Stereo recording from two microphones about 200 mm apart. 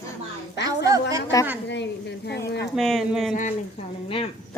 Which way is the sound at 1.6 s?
60° left (ahead or behind).